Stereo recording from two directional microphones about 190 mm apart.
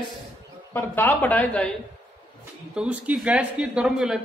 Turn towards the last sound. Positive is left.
turn(degrees=-5)  # may be behind; listen again after turning